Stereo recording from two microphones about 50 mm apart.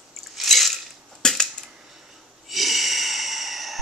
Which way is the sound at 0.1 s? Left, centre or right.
Centre.